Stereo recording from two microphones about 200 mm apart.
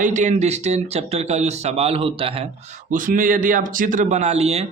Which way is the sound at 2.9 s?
40° right (ahead or behind).